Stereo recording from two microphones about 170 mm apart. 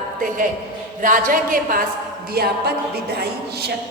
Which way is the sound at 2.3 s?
65° right (ahead or behind).